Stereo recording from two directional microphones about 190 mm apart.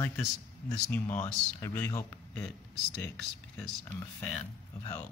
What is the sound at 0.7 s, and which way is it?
Speech, 5° left (ahead or behind).